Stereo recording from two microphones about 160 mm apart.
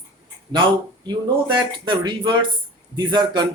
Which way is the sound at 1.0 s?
30° right (ahead or behind).